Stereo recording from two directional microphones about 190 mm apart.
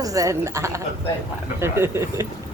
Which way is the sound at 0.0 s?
20° right (ahead or behind).